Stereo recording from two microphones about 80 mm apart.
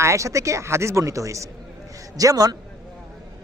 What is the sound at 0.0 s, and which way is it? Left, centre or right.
A woman's voice, right.